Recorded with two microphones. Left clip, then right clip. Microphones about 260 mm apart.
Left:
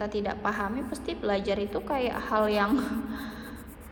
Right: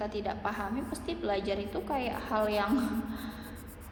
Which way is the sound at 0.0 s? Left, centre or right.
Left.